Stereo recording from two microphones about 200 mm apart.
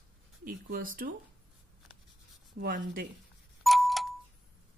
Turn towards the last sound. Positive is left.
turn(degrees=0)  # may be behind; listen again after turning